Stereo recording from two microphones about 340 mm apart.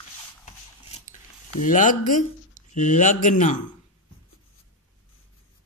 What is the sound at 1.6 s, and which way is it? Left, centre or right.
Speech, left.